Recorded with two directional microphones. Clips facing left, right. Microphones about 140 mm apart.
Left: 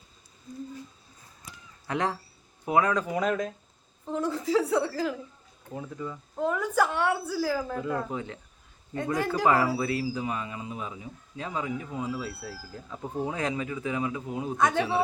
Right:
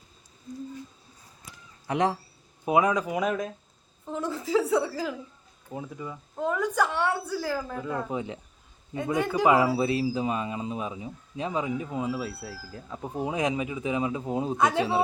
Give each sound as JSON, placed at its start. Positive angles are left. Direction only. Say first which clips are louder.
{"t": 1.9, "sound": "a woman's voice", "louder": "right 3 dB", "side_deg": -20}
{"t": 6.5, "sound": "a woman's voice", "louder": "even", "side_deg": 5}
{"t": 8.1, "sound": "a man's voice", "louder": "right 3 dB", "side_deg": -15}
{"t": 9.1, "sound": "a woman's voice", "louder": "right 2 dB", "side_deg": 0}
{"t": 9.5, "sound": "speech", "louder": "right 3 dB", "side_deg": -20}